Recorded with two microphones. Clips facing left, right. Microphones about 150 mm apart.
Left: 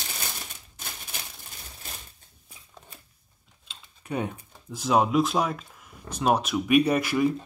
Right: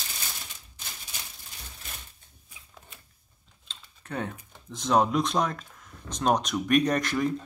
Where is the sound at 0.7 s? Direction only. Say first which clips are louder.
Left 5 dB; 55° left (ahead or behind).